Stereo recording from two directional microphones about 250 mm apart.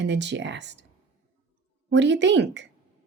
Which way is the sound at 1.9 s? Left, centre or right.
Right.